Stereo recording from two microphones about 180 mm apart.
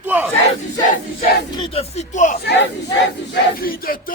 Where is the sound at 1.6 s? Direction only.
35° left (ahead or behind).